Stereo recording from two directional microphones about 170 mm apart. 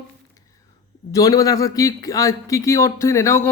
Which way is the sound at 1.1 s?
20° left (ahead or behind).